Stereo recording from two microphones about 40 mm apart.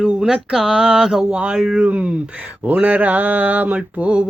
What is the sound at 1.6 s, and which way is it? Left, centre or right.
Speech, centre.